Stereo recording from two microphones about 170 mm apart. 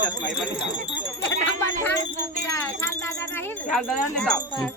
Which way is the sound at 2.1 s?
45° right (ahead or behind).